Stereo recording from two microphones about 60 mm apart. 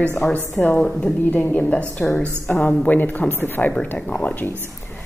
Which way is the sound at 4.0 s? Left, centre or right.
Centre.